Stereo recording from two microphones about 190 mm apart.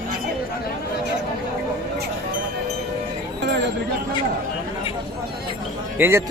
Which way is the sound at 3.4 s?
65° right (ahead or behind).